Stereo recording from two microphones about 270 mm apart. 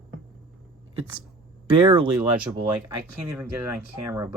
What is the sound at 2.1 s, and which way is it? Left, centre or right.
Speech, centre.